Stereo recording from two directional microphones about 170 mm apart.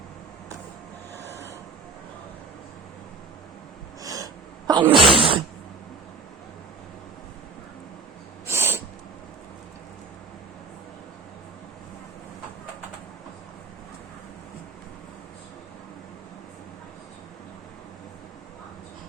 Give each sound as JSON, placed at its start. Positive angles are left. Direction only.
{"t": 1.3, "sound": "vehicle", "side_deg": 15}
{"t": 4.0, "sound": "sneeze", "side_deg": -20}
{"t": 8.4, "sound": "owl", "side_deg": -15}